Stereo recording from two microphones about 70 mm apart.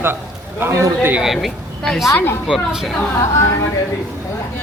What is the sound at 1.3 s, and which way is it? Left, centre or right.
A woman's voice, centre.